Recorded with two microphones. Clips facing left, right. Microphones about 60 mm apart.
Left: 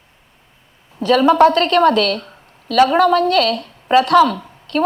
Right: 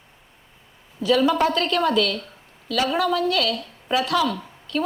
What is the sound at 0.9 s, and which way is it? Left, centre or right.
A woman's voice, left.